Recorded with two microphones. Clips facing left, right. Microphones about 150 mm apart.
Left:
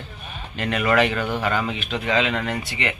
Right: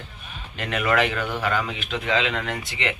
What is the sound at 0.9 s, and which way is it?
A man's voice, 15° left (ahead or behind).